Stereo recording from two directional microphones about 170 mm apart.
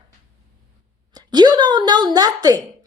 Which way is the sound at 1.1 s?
25° right (ahead or behind).